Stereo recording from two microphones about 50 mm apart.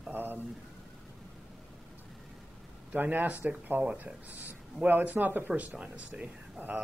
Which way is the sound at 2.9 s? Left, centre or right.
Right.